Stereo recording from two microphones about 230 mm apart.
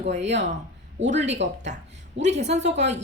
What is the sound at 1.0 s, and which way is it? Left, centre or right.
Speech, right.